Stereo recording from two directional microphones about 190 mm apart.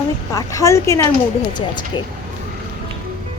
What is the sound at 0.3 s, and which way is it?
Speech, 15° left (ahead or behind).